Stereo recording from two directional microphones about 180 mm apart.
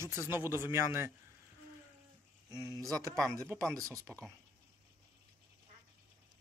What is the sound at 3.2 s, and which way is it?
Speech, 5° left (ahead or behind).